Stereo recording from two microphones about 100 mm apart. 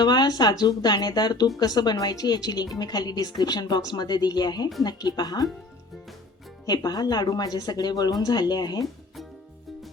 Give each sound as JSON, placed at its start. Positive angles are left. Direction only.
{"t": 0.0, "sound": "speech", "side_deg": 45}
{"t": 6.7, "sound": "speech", "side_deg": 45}